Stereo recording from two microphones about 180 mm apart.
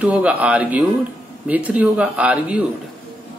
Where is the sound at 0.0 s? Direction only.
5° right (ahead or behind).